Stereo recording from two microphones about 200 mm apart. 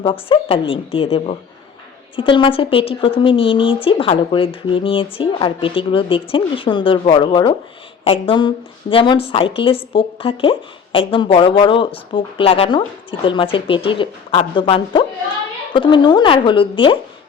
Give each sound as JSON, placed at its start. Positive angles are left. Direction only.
{"t": 0.0, "sound": "a woman's voice", "side_deg": 25}